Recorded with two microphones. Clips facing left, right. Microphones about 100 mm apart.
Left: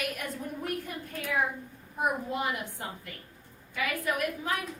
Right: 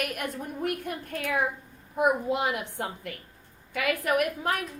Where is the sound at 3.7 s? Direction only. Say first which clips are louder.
Right 5 dB; 65° right (ahead or behind).